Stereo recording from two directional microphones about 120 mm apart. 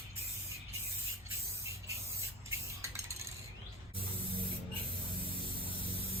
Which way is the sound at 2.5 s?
25° right (ahead or behind).